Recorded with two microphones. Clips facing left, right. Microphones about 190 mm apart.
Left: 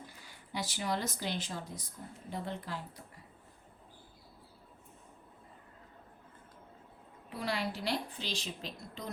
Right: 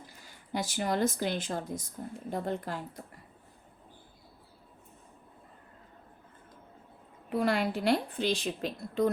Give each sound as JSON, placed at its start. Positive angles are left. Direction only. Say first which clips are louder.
{"t": 0.5, "sound": "speech", "louder": "right 5 dB", "side_deg": -50}
{"t": 7.3, "sound": "a woman's voice", "louder": "right 8 dB", "side_deg": -50}